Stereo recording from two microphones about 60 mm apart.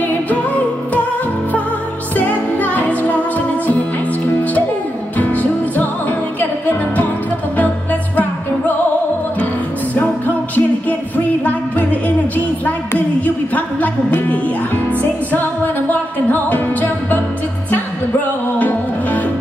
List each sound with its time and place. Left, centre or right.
0.0 s music: left
2.1 s music: left
5.1 s music: left
9.9 s music: left
18.6 s music: left